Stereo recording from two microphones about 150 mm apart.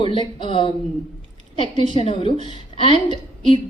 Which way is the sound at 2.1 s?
40° left (ahead or behind).